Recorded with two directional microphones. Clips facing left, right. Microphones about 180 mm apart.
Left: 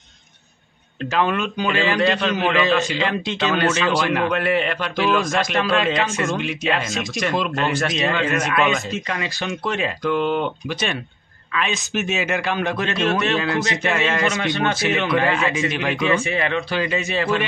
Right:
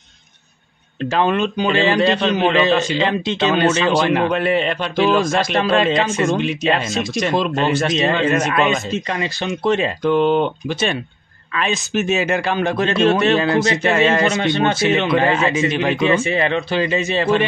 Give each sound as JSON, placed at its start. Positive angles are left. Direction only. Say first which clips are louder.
{"t": 1.1, "sound": "a man's voice", "louder": "right 3 dB", "side_deg": -30}
{"t": 9.4, "sound": "a man's voice", "louder": "right 9 dB", "side_deg": -20}
{"t": 9.8, "sound": "a man's voice", "louder": "right 5 dB", "side_deg": -30}